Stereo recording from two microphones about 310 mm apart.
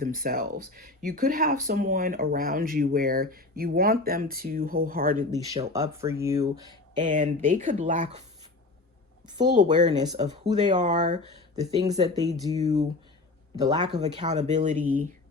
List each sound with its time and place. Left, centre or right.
0.0 s speech: right
5.5 s speech: centre
7.0 s speech: right
9.2 s speech: centre
9.9 s speech: centre
11.5 s speech: centre